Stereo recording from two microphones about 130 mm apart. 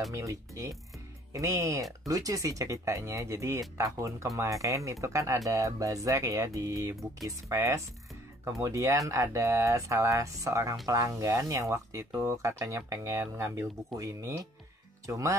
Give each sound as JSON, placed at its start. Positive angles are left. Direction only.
{"t": 0.1, "sound": "speech", "side_deg": -25}